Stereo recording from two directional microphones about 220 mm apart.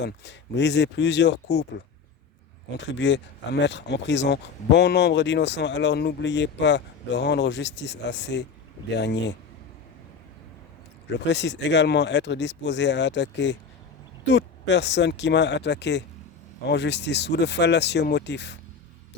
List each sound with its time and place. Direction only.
0.0 s speech: 50° left (ahead or behind)
11.3 s speech: 50° left (ahead or behind)